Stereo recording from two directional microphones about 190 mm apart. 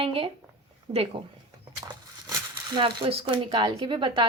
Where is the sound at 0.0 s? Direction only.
30° right (ahead or behind).